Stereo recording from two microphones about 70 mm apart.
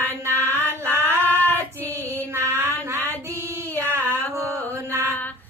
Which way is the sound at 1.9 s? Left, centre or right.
Right.